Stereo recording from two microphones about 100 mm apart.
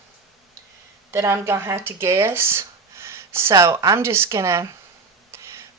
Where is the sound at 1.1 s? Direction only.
30° right (ahead or behind).